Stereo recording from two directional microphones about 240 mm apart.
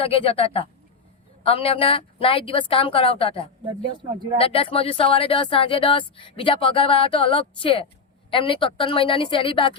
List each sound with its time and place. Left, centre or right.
0.0 s speech: left